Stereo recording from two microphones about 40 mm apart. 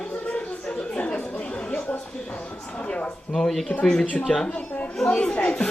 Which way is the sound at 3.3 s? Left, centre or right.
Centre.